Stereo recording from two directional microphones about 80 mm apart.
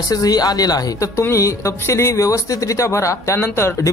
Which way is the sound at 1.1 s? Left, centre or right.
Left.